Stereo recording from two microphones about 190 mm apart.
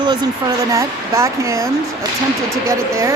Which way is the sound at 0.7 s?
15° right (ahead or behind).